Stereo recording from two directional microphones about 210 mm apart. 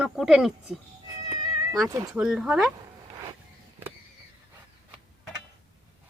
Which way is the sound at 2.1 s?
5° right (ahead or behind).